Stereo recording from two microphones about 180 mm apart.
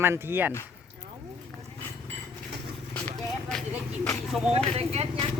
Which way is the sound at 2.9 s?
5° left (ahead or behind).